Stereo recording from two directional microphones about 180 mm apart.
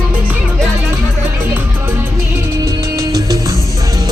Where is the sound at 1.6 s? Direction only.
10° right (ahead or behind).